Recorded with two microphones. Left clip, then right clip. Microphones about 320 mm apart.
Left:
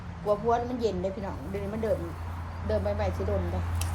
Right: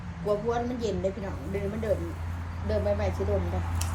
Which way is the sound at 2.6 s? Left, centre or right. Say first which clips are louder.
Right 1 dB; centre.